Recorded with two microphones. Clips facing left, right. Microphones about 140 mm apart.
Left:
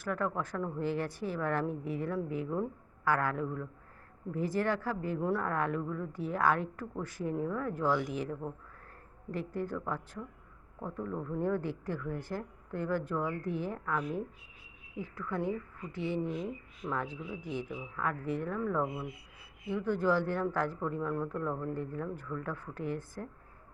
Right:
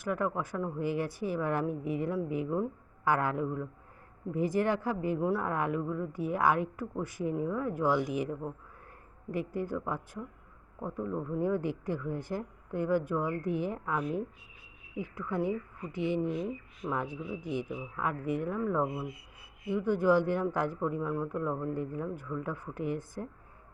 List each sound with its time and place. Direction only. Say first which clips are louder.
0.0 s speech: right 2 dB; 15° right (ahead or behind)